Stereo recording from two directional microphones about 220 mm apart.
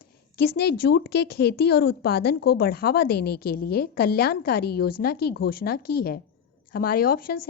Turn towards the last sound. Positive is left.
turn(degrees=40)  # may be behind; listen again after turning